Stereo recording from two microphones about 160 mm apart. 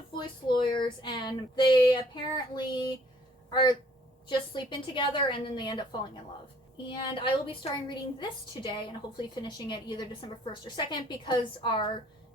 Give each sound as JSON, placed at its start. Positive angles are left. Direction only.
{"t": 0.2, "sound": "a woman's voice", "side_deg": 30}